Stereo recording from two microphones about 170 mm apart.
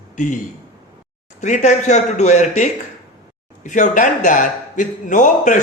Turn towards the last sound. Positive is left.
turn(degrees=50)  # may be behind; listen again after turning